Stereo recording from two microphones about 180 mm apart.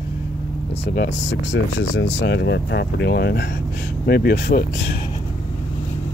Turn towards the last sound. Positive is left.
turn(degrees=60)  # may be behind; listen again after turning